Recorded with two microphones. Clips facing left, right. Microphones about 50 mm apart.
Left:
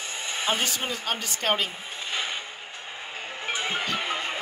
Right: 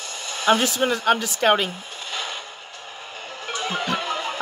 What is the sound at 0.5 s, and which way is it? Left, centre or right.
Speech, right.